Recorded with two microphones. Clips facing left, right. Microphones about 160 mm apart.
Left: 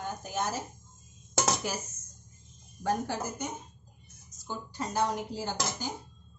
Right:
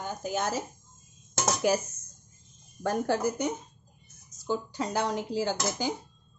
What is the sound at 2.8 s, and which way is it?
A woman's voice, 70° right (ahead or behind).